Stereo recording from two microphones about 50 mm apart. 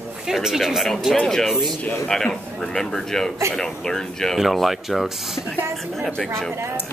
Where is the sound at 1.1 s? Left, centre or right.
Centre.